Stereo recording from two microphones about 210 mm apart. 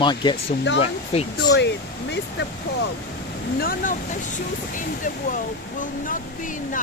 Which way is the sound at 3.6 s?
40° left (ahead or behind).